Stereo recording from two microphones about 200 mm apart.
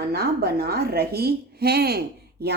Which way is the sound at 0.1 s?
50° right (ahead or behind).